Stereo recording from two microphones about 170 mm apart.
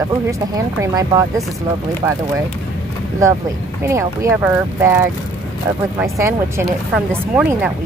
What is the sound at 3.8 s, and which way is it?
Speech, 20° right (ahead or behind).